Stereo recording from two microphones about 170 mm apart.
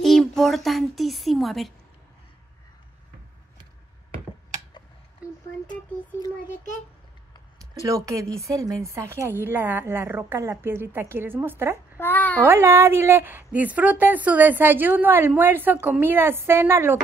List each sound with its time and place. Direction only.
0.0 s a sound: centre (ahead or behind)
7.8 s speech: 20° right (ahead or behind)
12.0 s a child's voice: 10° left (ahead or behind)
12.4 s speech: 15° right (ahead or behind)